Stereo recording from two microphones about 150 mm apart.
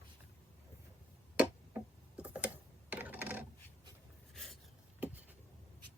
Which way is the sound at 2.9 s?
10° right (ahead or behind).